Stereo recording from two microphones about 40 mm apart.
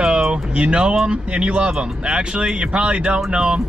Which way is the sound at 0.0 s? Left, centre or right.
Right.